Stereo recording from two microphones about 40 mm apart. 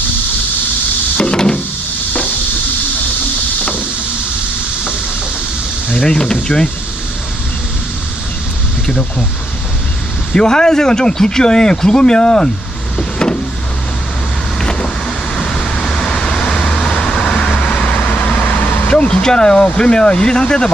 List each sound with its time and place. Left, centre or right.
1.1 s a sound: left
6.0 s speech: centre
10.3 s speech: centre
13.0 s vehicle: left
14.6 s vehicle: centre; by 18.4 s left
18.9 s speech: left